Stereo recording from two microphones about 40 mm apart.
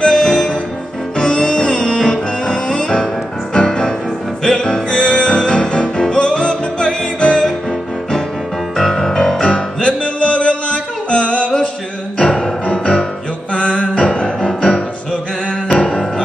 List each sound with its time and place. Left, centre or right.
0.0 s music: centre
8.7 s music: centre
9.5 s music: left
12.2 s music: centre